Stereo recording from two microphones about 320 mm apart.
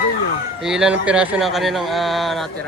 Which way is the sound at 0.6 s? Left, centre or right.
Centre.